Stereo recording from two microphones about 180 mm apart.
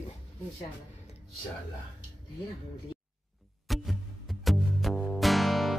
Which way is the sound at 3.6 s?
Centre (ahead or behind).